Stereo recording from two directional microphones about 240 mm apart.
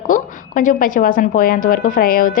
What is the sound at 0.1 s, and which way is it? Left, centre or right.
A woman's voice, left.